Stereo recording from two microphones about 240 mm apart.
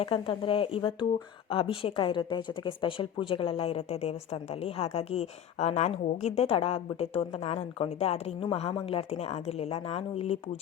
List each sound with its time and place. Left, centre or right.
0.0 s a woman's voice: left